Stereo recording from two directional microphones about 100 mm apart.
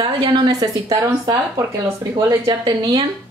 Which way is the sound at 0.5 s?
35° right (ahead or behind).